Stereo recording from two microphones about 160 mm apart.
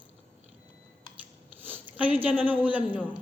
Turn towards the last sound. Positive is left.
turn(degrees=-10)  # may be behind; listen again after turning